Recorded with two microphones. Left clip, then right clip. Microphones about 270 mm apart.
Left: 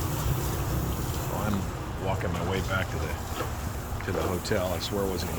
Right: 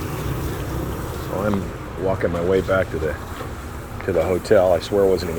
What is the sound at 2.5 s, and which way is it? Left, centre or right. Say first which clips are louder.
Speech: right 13 dB; right.